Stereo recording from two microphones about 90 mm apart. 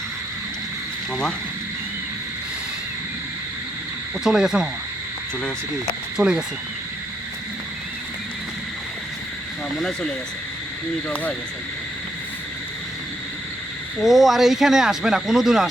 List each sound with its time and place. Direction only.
4.2 s speech: 5° right (ahead or behind)
6.1 s speech: 10° right (ahead or behind)
11.1 s speech: 15° left (ahead or behind)
14.0 s speech: centre (ahead or behind)